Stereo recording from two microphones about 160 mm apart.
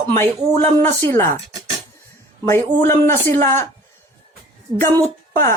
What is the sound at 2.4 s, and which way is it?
Speech, 20° left (ahead or behind).